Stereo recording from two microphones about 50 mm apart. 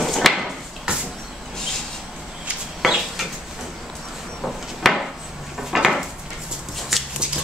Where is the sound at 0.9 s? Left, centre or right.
Centre.